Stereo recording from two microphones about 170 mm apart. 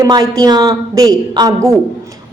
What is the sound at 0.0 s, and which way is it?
A woman's voice, 20° right (ahead or behind).